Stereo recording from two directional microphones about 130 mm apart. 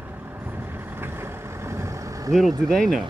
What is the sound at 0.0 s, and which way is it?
Vehicle, 15° right (ahead or behind).